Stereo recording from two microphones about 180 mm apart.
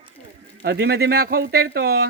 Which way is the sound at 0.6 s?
65° right (ahead or behind).